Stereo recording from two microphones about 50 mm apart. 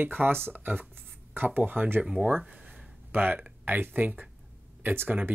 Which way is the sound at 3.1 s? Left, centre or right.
Right.